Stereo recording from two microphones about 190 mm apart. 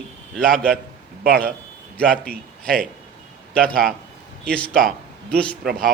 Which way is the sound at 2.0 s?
5° left (ahead or behind).